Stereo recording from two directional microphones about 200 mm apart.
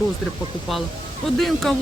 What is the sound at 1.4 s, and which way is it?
Speech, centre (ahead or behind).